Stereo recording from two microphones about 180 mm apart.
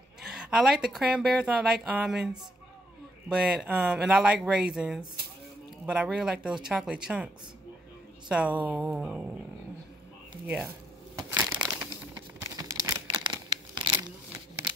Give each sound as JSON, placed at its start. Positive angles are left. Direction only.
{"t": 0.2, "sound": "a woman's voice", "side_deg": -5}
{"t": 8.3, "sound": "a woman's voice", "side_deg": -5}
{"t": 10.4, "sound": "speech", "side_deg": -5}
{"t": 11.1, "sound": "crushing", "side_deg": -10}
{"t": 12.1, "sound": "tearing", "side_deg": -20}